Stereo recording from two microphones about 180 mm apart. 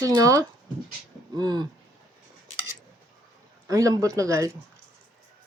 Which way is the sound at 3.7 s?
20° right (ahead or behind).